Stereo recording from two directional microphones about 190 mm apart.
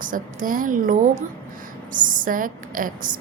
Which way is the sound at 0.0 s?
45° right (ahead or behind).